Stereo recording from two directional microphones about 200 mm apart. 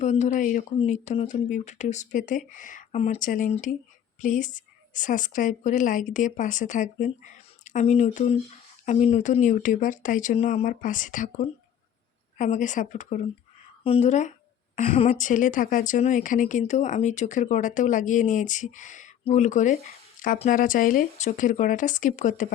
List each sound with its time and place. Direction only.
0.0 s a woman's voice: 35° left (ahead or behind)